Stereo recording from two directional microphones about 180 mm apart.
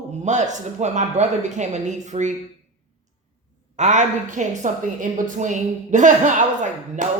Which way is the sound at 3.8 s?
45° right (ahead or behind).